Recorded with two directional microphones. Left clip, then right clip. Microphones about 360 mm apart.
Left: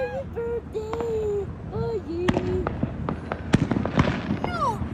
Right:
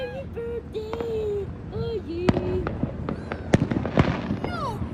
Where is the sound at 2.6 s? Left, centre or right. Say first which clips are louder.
Left 1 dB; centre.